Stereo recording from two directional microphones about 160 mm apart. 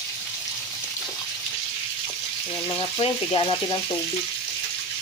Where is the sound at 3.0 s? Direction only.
35° left (ahead or behind).